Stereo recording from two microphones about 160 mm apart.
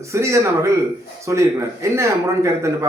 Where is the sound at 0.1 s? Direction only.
20° right (ahead or behind).